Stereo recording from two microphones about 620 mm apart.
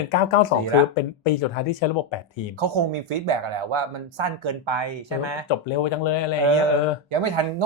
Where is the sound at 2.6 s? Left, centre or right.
Right.